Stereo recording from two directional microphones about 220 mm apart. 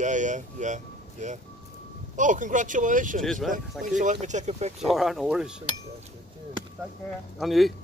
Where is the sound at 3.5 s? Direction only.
35° right (ahead or behind).